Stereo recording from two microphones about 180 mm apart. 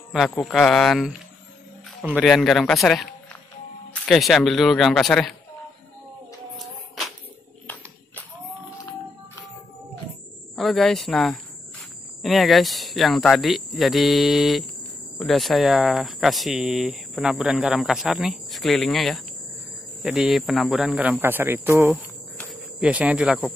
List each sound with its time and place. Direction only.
0.4 s speech: centre (ahead or behind)
10.5 s speech: centre (ahead or behind)